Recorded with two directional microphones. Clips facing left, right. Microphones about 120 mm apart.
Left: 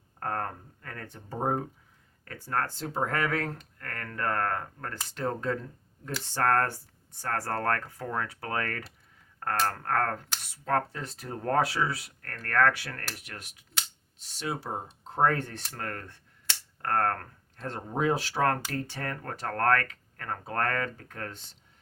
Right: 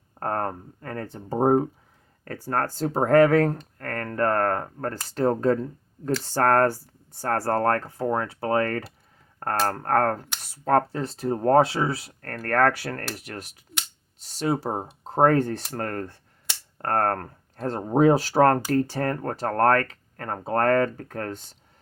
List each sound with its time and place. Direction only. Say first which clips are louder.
0.2 s speech: right 6 dB; 35° right (ahead or behind)